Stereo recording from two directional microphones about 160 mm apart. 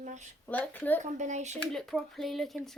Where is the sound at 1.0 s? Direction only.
50° right (ahead or behind).